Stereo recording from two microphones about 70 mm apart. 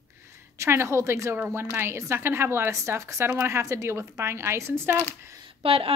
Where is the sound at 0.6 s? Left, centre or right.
Right.